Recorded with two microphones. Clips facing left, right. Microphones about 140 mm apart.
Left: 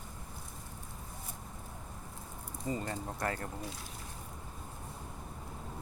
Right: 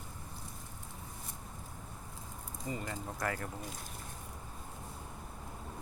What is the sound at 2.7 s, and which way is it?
Speech, 35° left (ahead or behind).